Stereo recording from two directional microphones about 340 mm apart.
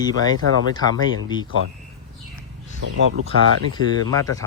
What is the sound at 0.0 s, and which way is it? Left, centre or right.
Speech, centre.